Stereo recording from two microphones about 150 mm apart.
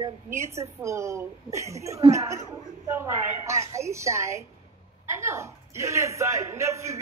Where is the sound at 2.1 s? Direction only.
20° right (ahead or behind).